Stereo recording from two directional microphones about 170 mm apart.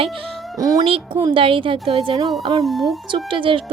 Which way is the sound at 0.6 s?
20° right (ahead or behind).